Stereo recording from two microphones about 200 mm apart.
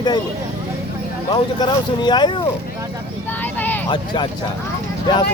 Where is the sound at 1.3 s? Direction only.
20° left (ahead or behind).